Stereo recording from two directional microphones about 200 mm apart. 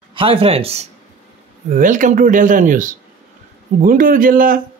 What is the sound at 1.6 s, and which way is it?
Speech, 40° right (ahead or behind).